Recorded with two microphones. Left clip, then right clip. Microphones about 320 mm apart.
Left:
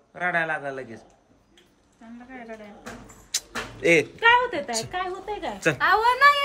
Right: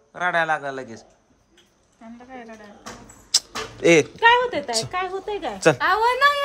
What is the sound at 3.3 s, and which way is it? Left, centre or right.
A woman's voice, centre.